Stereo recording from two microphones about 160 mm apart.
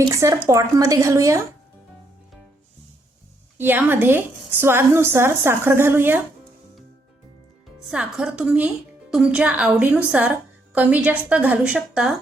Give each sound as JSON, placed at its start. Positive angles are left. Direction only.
{"t": 0.4, "sound": "speech", "side_deg": -20}
{"t": 3.6, "sound": "speech", "side_deg": -10}
{"t": 7.9, "sound": "speech", "side_deg": -5}